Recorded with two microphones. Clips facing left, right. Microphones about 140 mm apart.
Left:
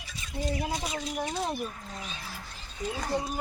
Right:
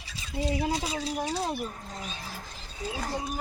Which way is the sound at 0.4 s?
30° right (ahead or behind).